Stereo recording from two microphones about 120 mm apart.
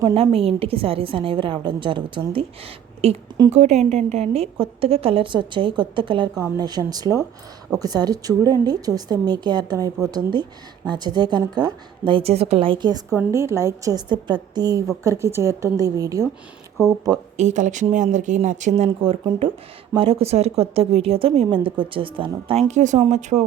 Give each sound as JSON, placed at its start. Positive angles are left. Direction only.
{"t": 0.1, "sound": "a woman's voice", "side_deg": -55}
{"t": 3.0, "sound": "a woman's voice", "side_deg": -55}
{"t": 3.5, "sound": "a woman's voice", "side_deg": -70}
{"t": 12.2, "sound": "a woman's voice", "side_deg": -60}
{"t": 13.3, "sound": "a woman's voice", "side_deg": -20}
{"t": 15.0, "sound": "a woman's voice", "side_deg": -25}
{"t": 17.3, "sound": "speech", "side_deg": -85}
{"t": 20.0, "sound": "a woman's voice", "side_deg": -55}
{"t": 22.7, "sound": "speech", "side_deg": -80}